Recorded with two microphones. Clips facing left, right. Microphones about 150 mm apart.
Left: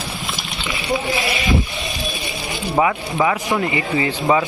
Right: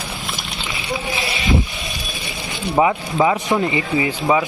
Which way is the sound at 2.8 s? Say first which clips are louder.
Right 3 dB; 20° right (ahead or behind).